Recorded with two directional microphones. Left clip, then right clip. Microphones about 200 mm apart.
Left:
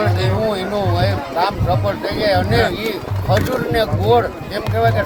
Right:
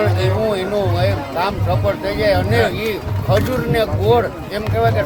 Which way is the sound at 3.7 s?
15° right (ahead or behind).